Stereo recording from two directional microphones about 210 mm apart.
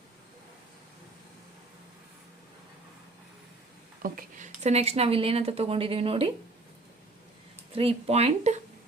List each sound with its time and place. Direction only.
4.0 s speech: 40° right (ahead or behind)
7.8 s speech: 30° right (ahead or behind)